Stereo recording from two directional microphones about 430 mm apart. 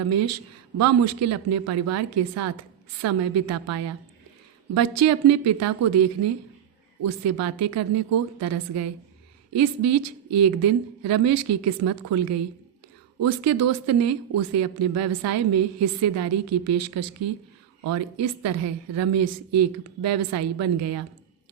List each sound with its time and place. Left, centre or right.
0.1 s a woman's voice: right
13.4 s a woman's voice: right